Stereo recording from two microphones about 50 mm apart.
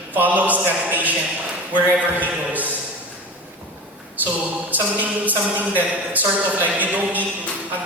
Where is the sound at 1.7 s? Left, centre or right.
Right.